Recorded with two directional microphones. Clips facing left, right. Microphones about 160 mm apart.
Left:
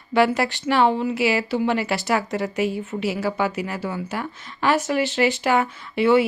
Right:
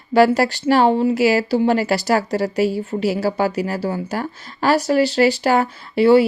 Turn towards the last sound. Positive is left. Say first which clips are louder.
# right 5 dB
turn(degrees=-35)  # may be behind; listen again after turning